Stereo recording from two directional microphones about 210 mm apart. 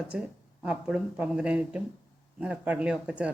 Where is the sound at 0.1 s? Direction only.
5° right (ahead or behind).